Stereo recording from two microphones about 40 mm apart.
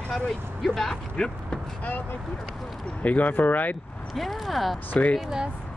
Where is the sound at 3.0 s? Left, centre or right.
Left.